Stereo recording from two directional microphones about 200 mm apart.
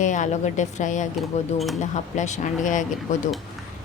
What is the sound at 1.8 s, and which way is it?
Speech, 35° left (ahead or behind).